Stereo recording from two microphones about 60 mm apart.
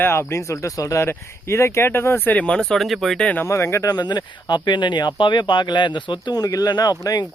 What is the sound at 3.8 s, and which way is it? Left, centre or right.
Speech, left.